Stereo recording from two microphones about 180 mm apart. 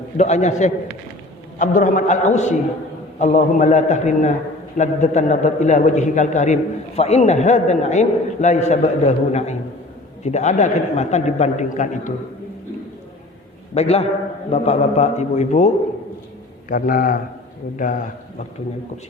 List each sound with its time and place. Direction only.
0.2 s a man's voice: 40° left (ahead or behind)
13.7 s a man's voice: 35° left (ahead or behind)